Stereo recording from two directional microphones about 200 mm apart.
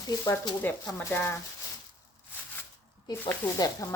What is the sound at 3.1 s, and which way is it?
Speech, 15° left (ahead or behind).